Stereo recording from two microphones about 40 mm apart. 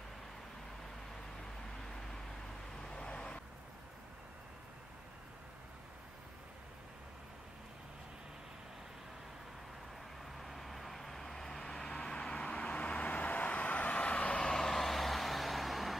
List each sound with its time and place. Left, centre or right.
2.8 s vehicle: left
10.4 s vehicle: centre
11.6 s vehicle: left
14.4 s vehicle: centre